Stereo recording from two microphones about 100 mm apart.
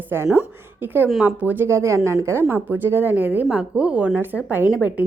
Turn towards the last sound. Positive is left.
turn(degrees=-15)  # may be behind; listen again after turning